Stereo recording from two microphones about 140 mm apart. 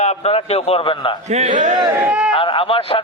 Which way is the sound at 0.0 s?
50° left (ahead or behind).